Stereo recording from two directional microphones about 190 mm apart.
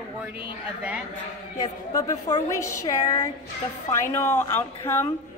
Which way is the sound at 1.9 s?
15° left (ahead or behind).